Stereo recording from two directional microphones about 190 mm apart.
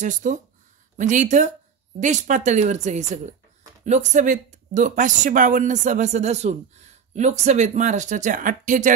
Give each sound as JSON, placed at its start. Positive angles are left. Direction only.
{"t": 0.0, "sound": "speech", "side_deg": -40}